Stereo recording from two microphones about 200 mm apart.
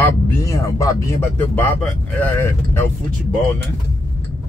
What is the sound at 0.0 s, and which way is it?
Speech, 15° left (ahead or behind).